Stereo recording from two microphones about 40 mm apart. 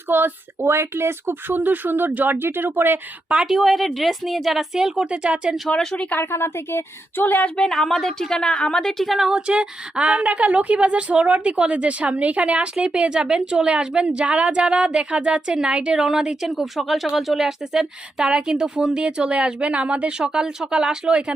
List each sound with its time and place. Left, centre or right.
0.1 s speech: right
3.4 s a woman's voice: centre
5.0 s speech: right
5.6 s a woman's voice: centre
6.1 s a woman's voice: left
7.2 s speech: left
7.6 s speech: centre
8.3 s a woman's voice: left
8.8 s speech: centre
9.0 s a woman's voice: centre
9.3 s a woman's voice: right